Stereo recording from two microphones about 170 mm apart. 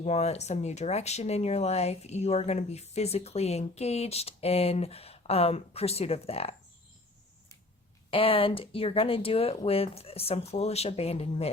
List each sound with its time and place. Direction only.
0.0 s speech: 40° left (ahead or behind)
8.1 s speech: 30° left (ahead or behind)